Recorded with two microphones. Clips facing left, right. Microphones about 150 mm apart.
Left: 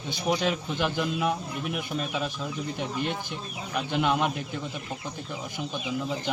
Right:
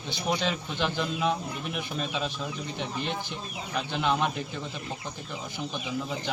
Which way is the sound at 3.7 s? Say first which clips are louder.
Left 2 dB; 10° left (ahead or behind).